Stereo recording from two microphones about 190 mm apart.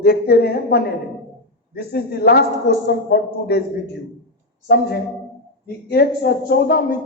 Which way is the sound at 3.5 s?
55° left (ahead or behind).